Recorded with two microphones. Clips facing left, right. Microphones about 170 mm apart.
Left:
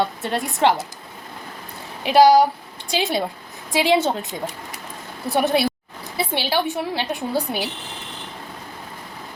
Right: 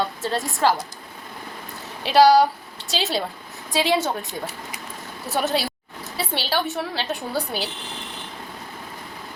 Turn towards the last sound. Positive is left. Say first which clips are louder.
# left 3 dB
turn(degrees=15)  # may be behind; listen again after turning